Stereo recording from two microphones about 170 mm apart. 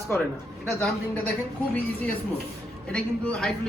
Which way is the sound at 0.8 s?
10° left (ahead or behind).